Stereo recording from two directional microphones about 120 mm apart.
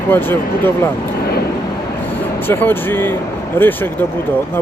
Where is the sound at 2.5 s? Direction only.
15° left (ahead or behind).